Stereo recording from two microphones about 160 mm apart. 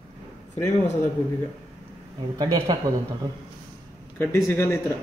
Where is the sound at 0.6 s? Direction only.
15° left (ahead or behind).